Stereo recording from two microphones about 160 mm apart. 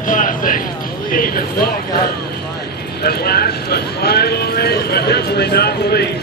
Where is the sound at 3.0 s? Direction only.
75° left (ahead or behind).